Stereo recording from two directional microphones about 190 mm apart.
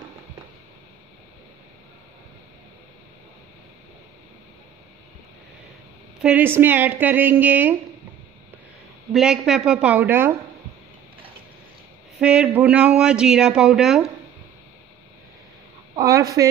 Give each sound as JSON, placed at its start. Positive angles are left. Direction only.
{"t": 6.2, "sound": "a woman's voice", "side_deg": -10}
{"t": 9.1, "sound": "a woman's voice", "side_deg": 0}
{"t": 12.2, "sound": "speech", "side_deg": -5}
{"t": 16.0, "sound": "a woman's voice", "side_deg": -15}